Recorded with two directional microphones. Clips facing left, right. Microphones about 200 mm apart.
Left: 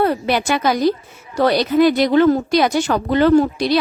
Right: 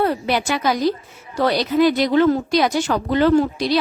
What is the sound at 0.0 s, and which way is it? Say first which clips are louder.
A woman's voice: left 2 dB; 60° left (ahead or behind).